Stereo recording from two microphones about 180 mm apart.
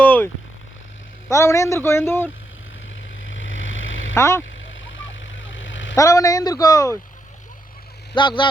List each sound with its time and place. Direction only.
0.0 s a sound: 10° left (ahead or behind)
1.3 s speech: 15° left (ahead or behind)
3.2 s vehicle: 90° left
4.1 s speech: 15° left (ahead or behind)
4.4 s vehicle: 90° left
6.0 s speech: 20° left (ahead or behind)
8.1 s speech: 25° left (ahead or behind)